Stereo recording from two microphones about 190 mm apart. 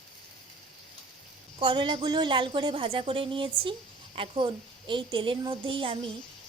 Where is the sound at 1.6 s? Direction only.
25° right (ahead or behind).